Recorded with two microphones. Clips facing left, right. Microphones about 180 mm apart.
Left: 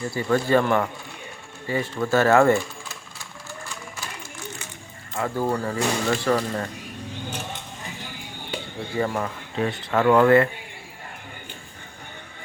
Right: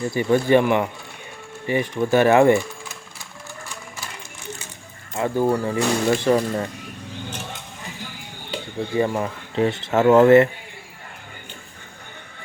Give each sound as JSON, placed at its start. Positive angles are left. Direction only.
{"t": 0.1, "sound": "speech", "side_deg": -20}
{"t": 5.1, "sound": "speech", "side_deg": -20}
{"t": 9.0, "sound": "speech", "side_deg": -20}